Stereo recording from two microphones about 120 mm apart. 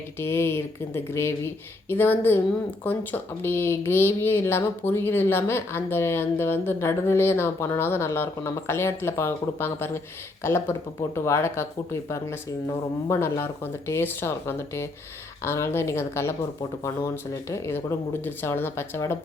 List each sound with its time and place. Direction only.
0.2 s speech: 20° left (ahead or behind)
17.5 s speech: 20° left (ahead or behind)